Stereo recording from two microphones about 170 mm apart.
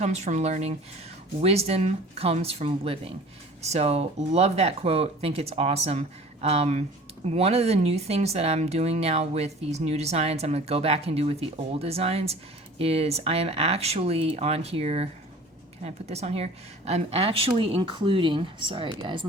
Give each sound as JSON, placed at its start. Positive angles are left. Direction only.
{"t": 0.0, "sound": "speech", "side_deg": -40}